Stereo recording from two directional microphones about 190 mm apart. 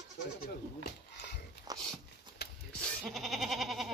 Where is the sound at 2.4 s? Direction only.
55° left (ahead or behind).